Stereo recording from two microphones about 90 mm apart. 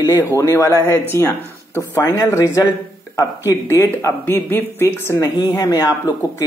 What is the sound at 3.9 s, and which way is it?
Speech, 25° left (ahead or behind).